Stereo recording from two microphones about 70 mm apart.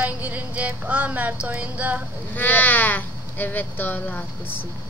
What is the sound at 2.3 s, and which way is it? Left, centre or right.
Speech, left.